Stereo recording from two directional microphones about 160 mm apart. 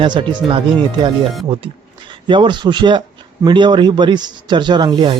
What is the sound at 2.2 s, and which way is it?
Speech, 30° right (ahead or behind).